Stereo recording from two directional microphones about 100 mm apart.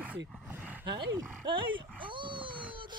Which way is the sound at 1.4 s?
55° right (ahead or behind).